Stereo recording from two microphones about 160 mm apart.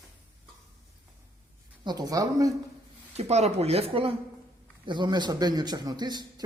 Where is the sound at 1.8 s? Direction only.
25° right (ahead or behind).